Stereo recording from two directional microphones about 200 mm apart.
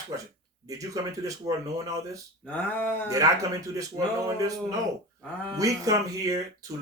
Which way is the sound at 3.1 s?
15° right (ahead or behind).